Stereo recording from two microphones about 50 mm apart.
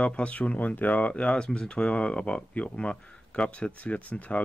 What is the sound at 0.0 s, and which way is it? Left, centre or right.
Speech, left.